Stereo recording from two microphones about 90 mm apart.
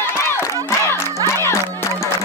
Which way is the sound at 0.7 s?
30° left (ahead or behind).